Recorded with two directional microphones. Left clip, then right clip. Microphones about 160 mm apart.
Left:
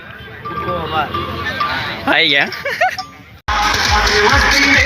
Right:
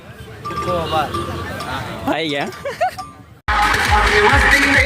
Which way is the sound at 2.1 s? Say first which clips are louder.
Left 8 dB; 15° right (ahead or behind).